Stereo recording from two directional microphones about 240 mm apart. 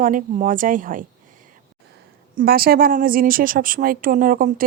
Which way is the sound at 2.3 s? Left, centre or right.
Right.